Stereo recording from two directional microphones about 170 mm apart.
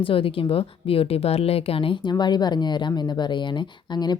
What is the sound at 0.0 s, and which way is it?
A woman's voice, 30° left (ahead or behind).